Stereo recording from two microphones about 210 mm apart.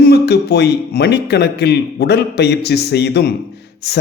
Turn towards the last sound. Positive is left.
turn(degrees=50)  # may be behind; listen again after turning